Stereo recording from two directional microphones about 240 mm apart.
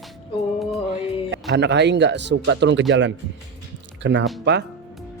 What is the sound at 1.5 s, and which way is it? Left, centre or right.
Speech, right.